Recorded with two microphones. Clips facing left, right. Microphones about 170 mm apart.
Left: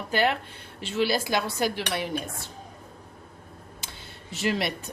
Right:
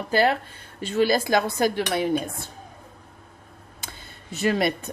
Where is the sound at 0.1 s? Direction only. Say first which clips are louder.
Right 4 dB; 35° right (ahead or behind).